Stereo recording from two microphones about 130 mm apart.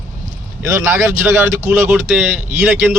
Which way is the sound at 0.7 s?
20° right (ahead or behind).